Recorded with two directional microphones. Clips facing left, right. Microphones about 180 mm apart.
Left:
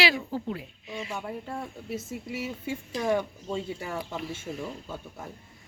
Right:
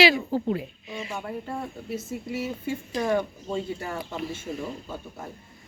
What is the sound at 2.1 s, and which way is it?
Speech, 45° right (ahead or behind).